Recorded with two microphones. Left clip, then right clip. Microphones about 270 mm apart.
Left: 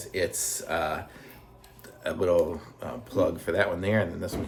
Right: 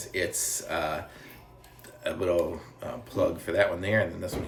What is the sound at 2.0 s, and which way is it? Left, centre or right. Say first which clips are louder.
Speech: left 3 dB; centre.